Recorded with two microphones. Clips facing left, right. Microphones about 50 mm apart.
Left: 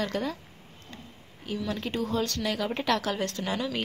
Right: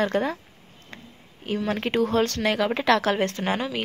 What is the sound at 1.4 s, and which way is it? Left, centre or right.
Speech, right.